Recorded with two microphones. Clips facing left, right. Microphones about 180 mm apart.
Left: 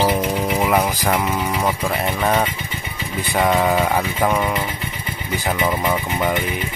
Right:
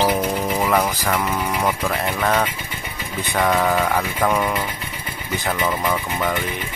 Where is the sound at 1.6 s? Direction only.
15° left (ahead or behind).